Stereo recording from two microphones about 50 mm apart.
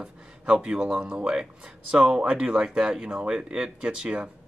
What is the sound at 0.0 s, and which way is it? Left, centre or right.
Speech, centre.